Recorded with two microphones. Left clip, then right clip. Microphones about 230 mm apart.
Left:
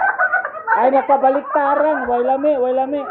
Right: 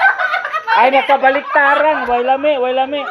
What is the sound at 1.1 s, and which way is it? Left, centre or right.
Speech, right.